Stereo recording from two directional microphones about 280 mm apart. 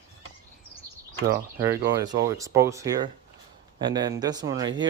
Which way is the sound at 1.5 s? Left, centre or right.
Centre.